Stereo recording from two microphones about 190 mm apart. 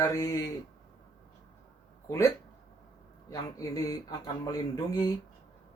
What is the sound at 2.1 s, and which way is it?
Speech, 15° left (ahead or behind).